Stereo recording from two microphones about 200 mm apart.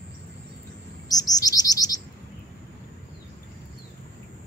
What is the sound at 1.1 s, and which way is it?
Chirp, 20° left (ahead or behind).